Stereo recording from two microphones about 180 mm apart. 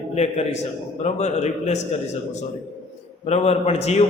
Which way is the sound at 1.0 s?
40° left (ahead or behind).